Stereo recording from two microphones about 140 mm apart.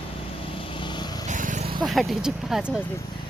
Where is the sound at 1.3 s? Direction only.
65° right (ahead or behind).